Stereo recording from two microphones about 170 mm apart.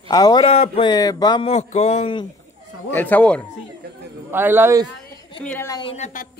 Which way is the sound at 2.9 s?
10° left (ahead or behind).